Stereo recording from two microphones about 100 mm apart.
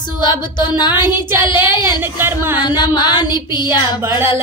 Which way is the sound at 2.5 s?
45° left (ahead or behind).